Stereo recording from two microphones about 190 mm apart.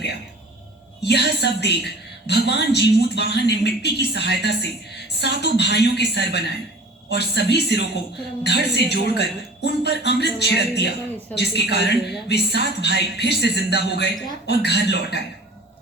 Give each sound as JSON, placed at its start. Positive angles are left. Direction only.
{"t": 1.0, "sound": "a woman's voice", "side_deg": 60}